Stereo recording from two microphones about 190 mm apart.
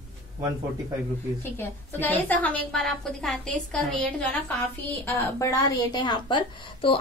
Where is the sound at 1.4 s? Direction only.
10° left (ahead or behind).